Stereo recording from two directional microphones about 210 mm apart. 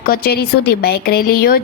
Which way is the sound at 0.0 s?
45° left (ahead or behind).